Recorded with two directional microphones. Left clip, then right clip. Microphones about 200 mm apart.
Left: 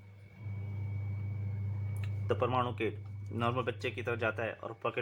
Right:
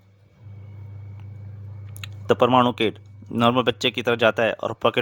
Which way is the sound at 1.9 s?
55° right (ahead or behind).